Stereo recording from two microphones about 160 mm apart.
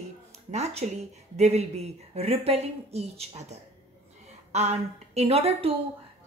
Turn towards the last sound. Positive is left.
turn(degrees=-40)  # may be behind; listen again after turning